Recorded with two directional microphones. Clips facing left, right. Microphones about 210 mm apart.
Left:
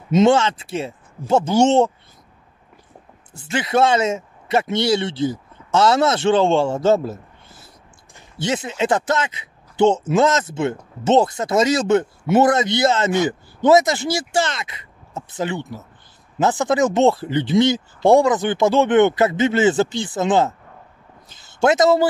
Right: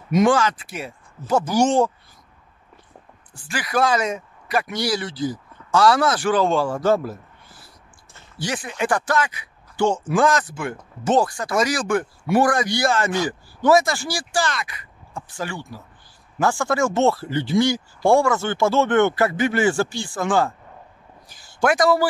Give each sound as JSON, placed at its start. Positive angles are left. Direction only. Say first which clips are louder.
{"t": 0.1, "sound": "speech", "louder": "left 3 dB", "side_deg": 25}
{"t": 3.3, "sound": "speech", "louder": "left 4 dB", "side_deg": 25}